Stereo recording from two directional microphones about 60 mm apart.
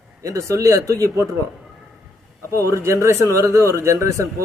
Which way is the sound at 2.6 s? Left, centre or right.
Right.